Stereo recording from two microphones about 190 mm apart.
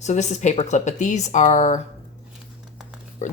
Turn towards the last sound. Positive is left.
turn(degrees=40)  # may be behind; listen again after turning